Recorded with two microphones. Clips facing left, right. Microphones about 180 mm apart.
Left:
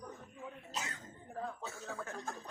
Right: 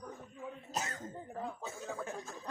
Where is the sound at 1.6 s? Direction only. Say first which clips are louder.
Right 3 dB; 15° right (ahead or behind).